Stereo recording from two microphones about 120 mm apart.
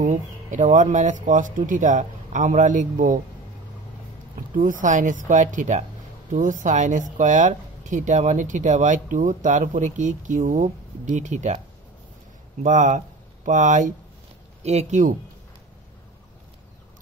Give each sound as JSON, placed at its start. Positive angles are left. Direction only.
{"t": 0.0, "sound": "speech", "side_deg": -90}
{"t": 4.6, "sound": "speech", "side_deg": -90}
{"t": 12.6, "sound": "speech", "side_deg": -90}
{"t": 14.6, "sound": "speech", "side_deg": -65}